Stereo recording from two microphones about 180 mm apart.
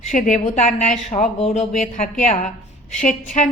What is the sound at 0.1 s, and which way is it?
A woman's voice, 45° left (ahead or behind).